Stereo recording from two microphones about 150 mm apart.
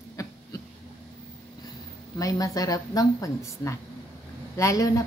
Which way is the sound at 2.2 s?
25° left (ahead or behind).